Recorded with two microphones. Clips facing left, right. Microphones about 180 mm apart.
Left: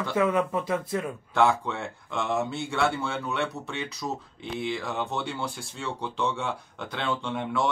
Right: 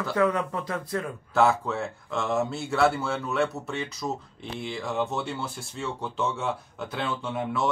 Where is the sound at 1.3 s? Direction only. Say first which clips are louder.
Right 1 dB; centre (ahead or behind).